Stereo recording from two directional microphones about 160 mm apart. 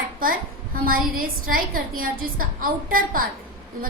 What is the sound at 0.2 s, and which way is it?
A woman's voice, 60° right (ahead or behind).